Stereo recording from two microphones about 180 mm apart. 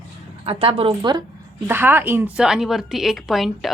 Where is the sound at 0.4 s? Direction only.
30° right (ahead or behind).